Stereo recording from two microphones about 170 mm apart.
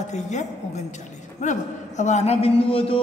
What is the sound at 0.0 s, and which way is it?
Mantra, 45° left (ahead or behind).